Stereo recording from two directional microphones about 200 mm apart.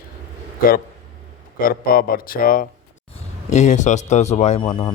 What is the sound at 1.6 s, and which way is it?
Speech, 45° left (ahead or behind).